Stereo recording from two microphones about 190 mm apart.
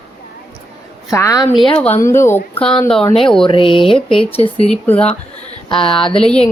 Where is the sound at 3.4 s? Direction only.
25° left (ahead or behind).